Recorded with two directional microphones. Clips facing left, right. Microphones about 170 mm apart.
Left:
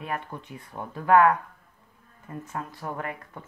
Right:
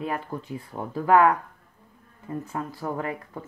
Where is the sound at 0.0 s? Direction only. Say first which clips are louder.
Right 3 dB; 30° right (ahead or behind).